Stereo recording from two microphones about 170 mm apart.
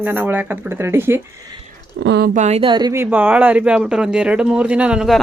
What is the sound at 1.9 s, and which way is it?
Speech, 90° right.